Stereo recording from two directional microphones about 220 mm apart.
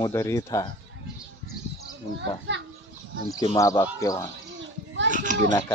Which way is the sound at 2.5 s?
55° right (ahead or behind).